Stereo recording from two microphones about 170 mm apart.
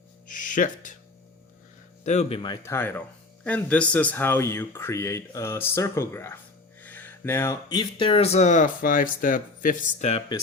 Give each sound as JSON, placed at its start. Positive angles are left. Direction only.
{"t": 0.3, "sound": "music", "side_deg": 50}
{"t": 2.0, "sound": "speech", "side_deg": 40}
{"t": 2.4, "sound": "speech", "side_deg": 20}
{"t": 6.8, "sound": "a sound", "side_deg": 10}
{"t": 7.7, "sound": "speech", "side_deg": 25}
{"t": 10.1, "sound": "speech", "side_deg": 30}